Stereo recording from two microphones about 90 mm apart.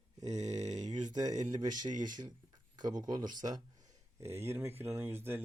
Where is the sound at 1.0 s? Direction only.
50° right (ahead or behind).